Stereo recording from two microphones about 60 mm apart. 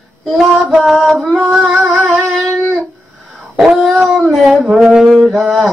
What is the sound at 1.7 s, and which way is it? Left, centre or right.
Music, right.